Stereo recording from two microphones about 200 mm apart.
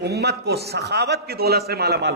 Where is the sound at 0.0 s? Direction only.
55° right (ahead or behind).